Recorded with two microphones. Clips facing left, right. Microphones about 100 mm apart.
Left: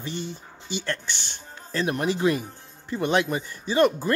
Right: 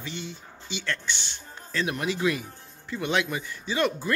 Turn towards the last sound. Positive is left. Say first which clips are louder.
# left 6 dB
turn(degrees=40)  # may be behind; listen again after turning